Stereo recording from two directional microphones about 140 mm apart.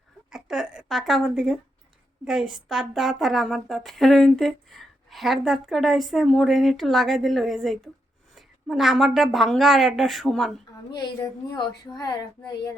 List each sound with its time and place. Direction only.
0.3 s a woman's voice: 5° right (ahead or behind)
10.9 s speech: 30° left (ahead or behind)